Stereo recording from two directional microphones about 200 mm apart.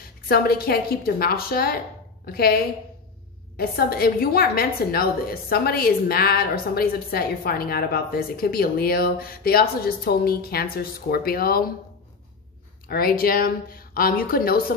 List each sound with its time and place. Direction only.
0.3 s a woman's voice: 50° left (ahead or behind)
12.8 s a woman's voice: 45° left (ahead or behind)